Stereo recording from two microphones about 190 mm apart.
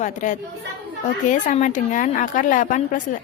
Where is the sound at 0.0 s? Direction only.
40° left (ahead or behind).